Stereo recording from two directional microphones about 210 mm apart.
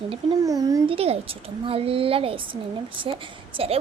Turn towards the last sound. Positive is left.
turn(degrees=-30)  # may be behind; listen again after turning